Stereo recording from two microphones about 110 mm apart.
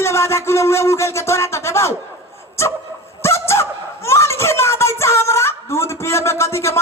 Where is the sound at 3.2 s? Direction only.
25° left (ahead or behind).